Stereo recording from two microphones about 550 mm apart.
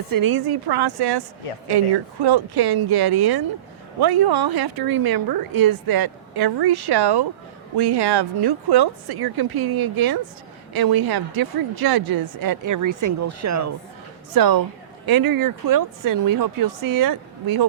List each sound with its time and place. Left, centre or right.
0.1 s a woman's voice: right
2.2 s a woman's voice: right